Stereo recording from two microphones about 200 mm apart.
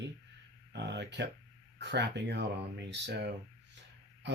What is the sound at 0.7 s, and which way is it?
Speech, 60° right (ahead or behind).